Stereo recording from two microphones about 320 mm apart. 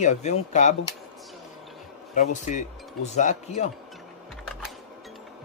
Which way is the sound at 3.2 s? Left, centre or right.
Left.